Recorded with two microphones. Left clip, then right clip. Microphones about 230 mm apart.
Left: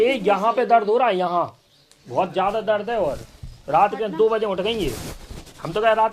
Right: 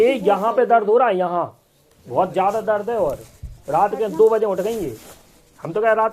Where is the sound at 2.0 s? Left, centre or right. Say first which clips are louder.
Right 3 dB; centre.